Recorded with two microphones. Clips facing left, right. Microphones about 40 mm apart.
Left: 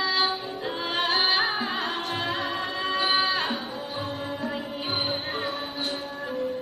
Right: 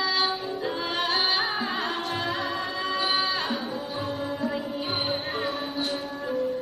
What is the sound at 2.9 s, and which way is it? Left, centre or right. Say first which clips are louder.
Music: left 3 dB; centre.